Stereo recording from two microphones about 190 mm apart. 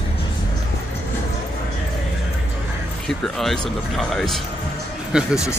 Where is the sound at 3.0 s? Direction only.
Centre (ahead or behind).